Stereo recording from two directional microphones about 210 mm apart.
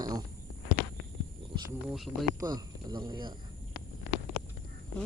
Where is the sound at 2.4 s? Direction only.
20° right (ahead or behind).